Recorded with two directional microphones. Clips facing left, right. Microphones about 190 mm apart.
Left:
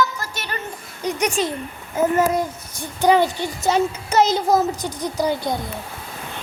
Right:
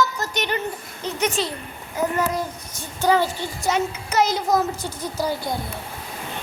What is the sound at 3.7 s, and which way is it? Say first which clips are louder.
A woman's voice: left 4 dB; 30° left (ahead or behind).